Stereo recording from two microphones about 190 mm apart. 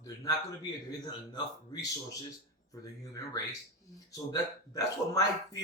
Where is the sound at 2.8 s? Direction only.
20° left (ahead or behind).